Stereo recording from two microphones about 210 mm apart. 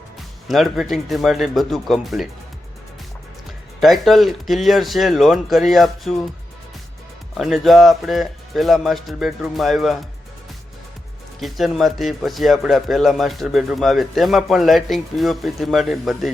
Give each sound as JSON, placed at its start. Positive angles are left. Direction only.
{"t": 0.4, "sound": "speech", "side_deg": 0}
{"t": 3.8, "sound": "speech", "side_deg": 0}
{"t": 7.3, "sound": "speech", "side_deg": 0}
{"t": 11.3, "sound": "speech", "side_deg": 0}